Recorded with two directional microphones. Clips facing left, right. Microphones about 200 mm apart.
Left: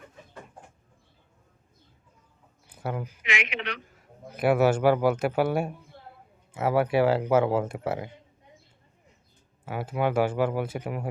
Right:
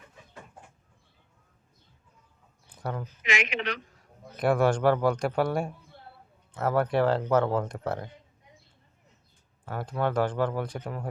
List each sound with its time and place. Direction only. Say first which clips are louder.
2.6 s a sound: left 2 dB; 5° left (ahead or behind)
3.2 s a man's voice: right 3 dB; 40° right (ahead or behind)
4.3 s a man's voice: left 2 dB; 5° left (ahead or behind)
9.6 s speech: left 2 dB; 5° left (ahead or behind)